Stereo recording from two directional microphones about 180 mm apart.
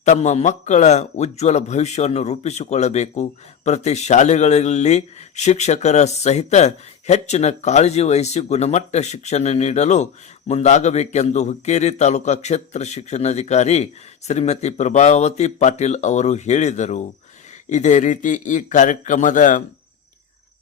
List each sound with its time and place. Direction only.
0.0 s a man's voice: 40° left (ahead or behind)